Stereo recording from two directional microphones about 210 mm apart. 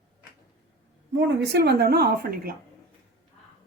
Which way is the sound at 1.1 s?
55° right (ahead or behind).